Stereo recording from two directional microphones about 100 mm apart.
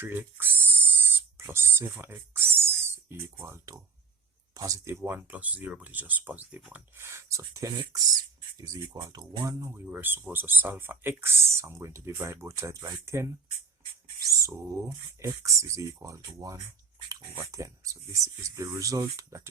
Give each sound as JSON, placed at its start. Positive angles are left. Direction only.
{"t": 0.0, "sound": "a sound", "side_deg": -20}
{"t": 4.5, "sound": "speech", "side_deg": -35}
{"t": 9.7, "sound": "speech", "side_deg": -20}